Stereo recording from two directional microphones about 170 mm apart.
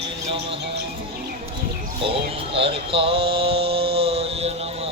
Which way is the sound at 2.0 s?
30° right (ahead or behind).